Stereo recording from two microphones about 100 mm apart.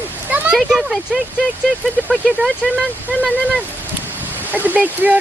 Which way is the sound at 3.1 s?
10° left (ahead or behind).